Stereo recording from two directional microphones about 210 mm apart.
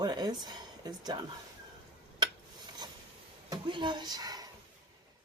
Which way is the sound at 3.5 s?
20° right (ahead or behind).